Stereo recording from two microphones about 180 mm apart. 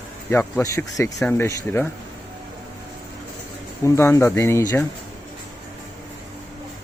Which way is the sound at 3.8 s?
15° left (ahead or behind).